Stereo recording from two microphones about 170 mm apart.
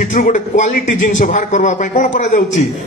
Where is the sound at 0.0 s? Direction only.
50° left (ahead or behind).